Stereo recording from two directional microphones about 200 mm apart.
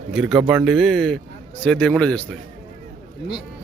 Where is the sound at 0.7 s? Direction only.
Centre (ahead or behind).